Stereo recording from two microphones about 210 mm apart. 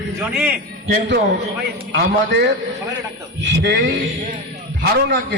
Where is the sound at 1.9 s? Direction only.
55° right (ahead or behind).